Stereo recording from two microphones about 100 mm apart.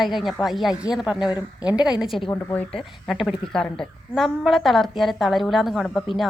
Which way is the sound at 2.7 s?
Centre (ahead or behind).